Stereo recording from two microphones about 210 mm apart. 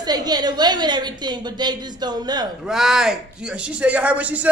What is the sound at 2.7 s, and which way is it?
A woman's voice, centre (ahead or behind).